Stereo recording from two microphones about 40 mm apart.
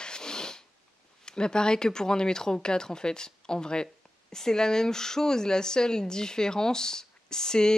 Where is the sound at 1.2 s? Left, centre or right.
Left.